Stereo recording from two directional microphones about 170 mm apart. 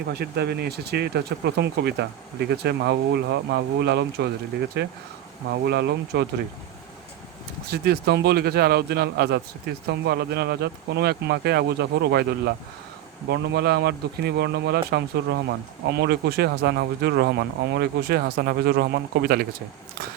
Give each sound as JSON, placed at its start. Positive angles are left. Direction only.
{"t": 0.1, "sound": "speech", "side_deg": -75}
{"t": 7.7, "sound": "speech", "side_deg": -70}